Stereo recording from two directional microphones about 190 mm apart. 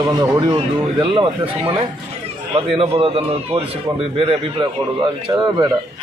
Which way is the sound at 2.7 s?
30° right (ahead or behind).